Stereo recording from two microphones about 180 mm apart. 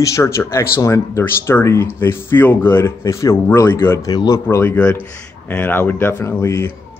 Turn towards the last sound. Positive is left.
turn(degrees=15)  # may be behind; listen again after turning